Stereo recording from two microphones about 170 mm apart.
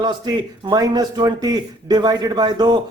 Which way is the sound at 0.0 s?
25° right (ahead or behind).